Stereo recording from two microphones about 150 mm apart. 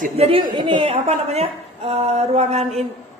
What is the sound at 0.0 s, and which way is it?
A woman's voice, 40° right (ahead or behind).